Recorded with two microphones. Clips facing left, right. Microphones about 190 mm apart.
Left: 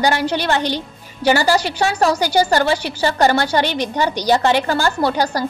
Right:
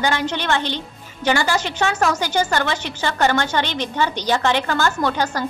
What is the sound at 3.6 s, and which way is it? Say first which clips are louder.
Speech: left 4 dB; 10° left (ahead or behind).